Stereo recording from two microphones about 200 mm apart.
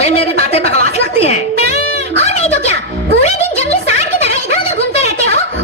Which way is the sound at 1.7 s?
35° left (ahead or behind).